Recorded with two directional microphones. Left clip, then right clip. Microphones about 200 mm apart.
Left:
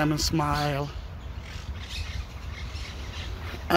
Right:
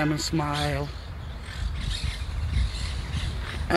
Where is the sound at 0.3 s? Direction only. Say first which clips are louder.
Left 1 dB; 10° left (ahead or behind).